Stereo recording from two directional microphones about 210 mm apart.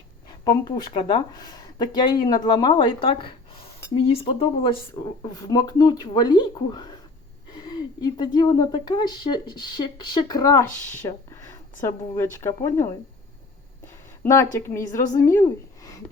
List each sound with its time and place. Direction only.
0.4 s speech: 20° left (ahead or behind)
14.3 s speech: 15° left (ahead or behind)